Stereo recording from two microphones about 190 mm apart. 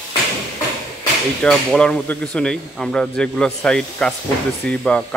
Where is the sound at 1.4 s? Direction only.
5° left (ahead or behind).